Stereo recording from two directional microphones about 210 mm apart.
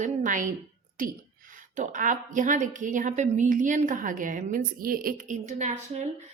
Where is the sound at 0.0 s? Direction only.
35° right (ahead or behind).